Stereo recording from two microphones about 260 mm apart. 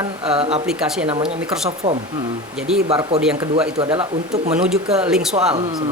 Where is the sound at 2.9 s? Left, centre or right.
Right.